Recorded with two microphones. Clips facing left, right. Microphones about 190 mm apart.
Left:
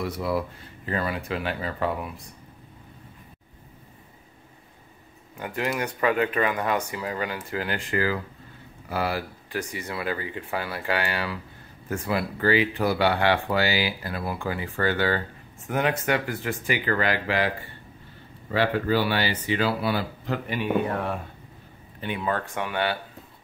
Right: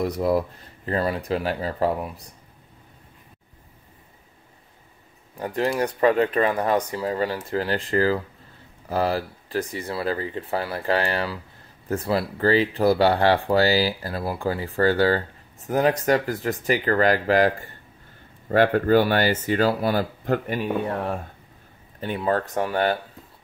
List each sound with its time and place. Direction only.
0.0 s speech: 40° right (ahead or behind)
5.4 s speech: 35° right (ahead or behind)
22.0 s speech: 40° right (ahead or behind)